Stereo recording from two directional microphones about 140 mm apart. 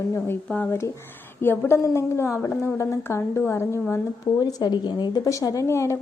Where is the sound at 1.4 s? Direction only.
15° left (ahead or behind).